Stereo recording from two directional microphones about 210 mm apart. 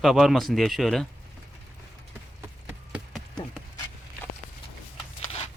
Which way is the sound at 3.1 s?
5° left (ahead or behind).